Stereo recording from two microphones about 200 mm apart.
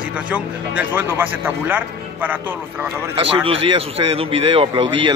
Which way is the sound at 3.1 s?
30° right (ahead or behind).